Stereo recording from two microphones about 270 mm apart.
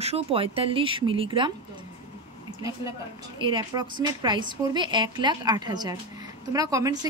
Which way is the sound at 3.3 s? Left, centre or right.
Centre.